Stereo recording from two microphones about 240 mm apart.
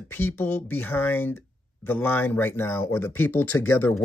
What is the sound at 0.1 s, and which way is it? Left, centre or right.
Speech, centre.